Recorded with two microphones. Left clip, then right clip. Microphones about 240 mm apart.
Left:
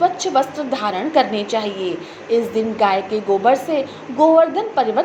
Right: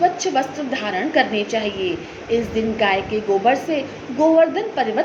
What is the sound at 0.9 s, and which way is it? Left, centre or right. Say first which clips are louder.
A woman's voice: left 1 dB; left.